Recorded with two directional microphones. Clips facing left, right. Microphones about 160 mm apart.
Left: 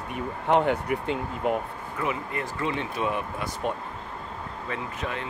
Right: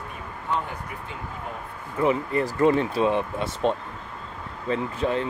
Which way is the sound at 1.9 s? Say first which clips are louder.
Right 8 dB; 35° right (ahead or behind).